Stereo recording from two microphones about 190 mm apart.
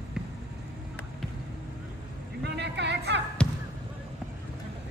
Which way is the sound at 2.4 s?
65° right (ahead or behind).